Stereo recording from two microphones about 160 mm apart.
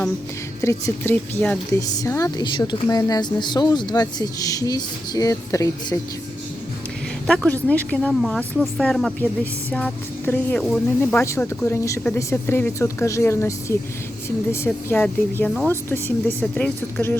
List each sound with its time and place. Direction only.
0.6 s a woman's voice: 15° left (ahead or behind)
7.3 s speech: 5° left (ahead or behind)